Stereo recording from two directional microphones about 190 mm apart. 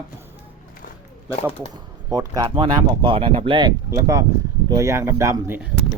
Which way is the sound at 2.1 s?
20° right (ahead or behind).